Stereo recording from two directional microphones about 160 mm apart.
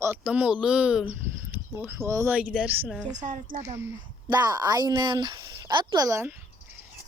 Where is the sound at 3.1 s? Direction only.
55° right (ahead or behind).